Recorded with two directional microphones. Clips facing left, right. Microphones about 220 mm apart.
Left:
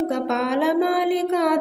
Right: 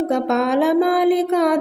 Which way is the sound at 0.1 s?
50° right (ahead or behind).